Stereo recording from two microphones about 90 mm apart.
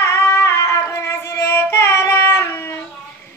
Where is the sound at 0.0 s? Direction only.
30° left (ahead or behind).